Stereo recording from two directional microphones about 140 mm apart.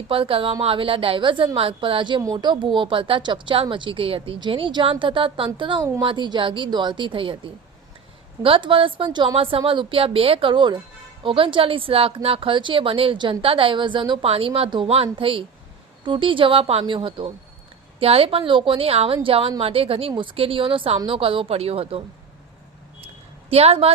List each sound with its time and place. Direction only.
0.1 s a woman's voice: 40° right (ahead or behind)
23.5 s a woman's voice: 45° right (ahead or behind)